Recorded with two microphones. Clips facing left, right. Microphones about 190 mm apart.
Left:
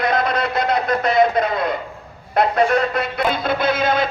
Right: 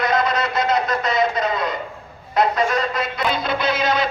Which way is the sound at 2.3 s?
55° left (ahead or behind).